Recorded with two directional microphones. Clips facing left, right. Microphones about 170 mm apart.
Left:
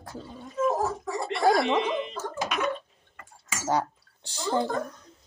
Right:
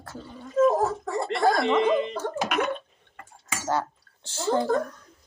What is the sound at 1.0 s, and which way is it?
Speech, 55° right (ahead or behind).